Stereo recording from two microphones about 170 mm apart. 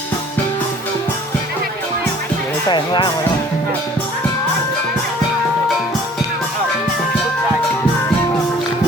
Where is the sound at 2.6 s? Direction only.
25° left (ahead or behind).